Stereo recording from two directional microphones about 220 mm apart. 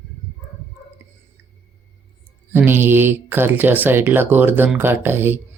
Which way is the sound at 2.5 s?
10° right (ahead or behind).